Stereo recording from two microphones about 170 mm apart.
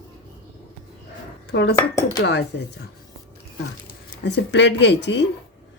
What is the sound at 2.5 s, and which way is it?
Speech, 90° left.